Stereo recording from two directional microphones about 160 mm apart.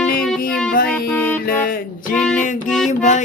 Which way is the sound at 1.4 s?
60° left (ahead or behind).